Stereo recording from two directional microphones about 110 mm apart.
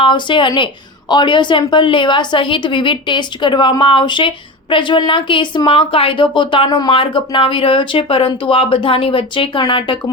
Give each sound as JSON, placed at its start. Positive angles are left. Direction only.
{"t": 0.0, "sound": "speech", "side_deg": 45}